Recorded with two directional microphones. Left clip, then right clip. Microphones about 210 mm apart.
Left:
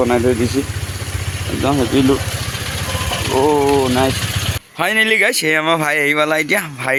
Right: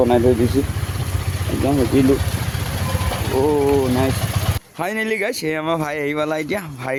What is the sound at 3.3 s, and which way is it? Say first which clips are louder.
Speech: left 3 dB; 25° left (ahead or behind).